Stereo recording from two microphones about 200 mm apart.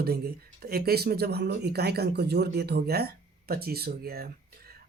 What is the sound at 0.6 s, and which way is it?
Speech, 50° right (ahead or behind).